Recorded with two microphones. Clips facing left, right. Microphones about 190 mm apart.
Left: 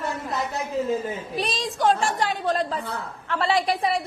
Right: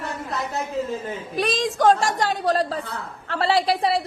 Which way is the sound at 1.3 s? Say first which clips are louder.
Right 8 dB; 50° right (ahead or behind).